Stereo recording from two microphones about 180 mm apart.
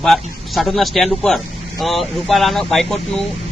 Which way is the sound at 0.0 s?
Centre (ahead or behind).